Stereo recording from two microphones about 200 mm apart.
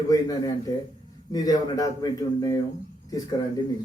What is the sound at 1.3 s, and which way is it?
A man's voice, 20° left (ahead or behind).